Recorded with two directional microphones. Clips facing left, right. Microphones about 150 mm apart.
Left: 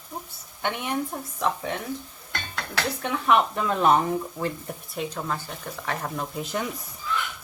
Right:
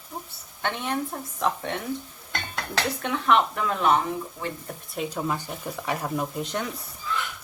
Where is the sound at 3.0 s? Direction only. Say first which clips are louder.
Left 1 dB; centre (ahead or behind).